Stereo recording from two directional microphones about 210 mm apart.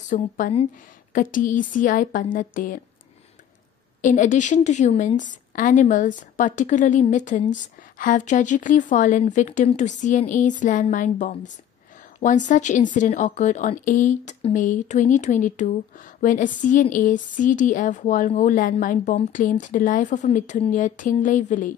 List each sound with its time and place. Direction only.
0.1 s a woman's voice: 35° left (ahead or behind)
4.0 s a woman's voice: 35° left (ahead or behind)